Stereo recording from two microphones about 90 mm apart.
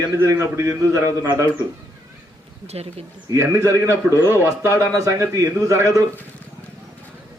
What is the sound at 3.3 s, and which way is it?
Speech, 35° right (ahead or behind).